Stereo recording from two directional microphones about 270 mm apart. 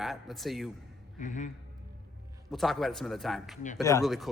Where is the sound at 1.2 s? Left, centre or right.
Left.